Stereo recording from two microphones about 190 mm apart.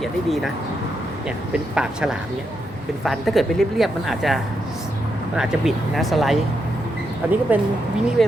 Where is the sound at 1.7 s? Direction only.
5° right (ahead or behind).